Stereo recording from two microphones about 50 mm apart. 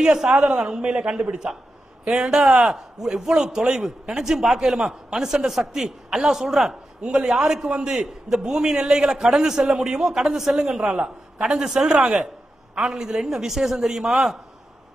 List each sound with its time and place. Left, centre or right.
0.0 s a man's voice: centre